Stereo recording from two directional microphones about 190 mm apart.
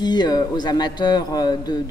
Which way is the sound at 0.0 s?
20° left (ahead or behind).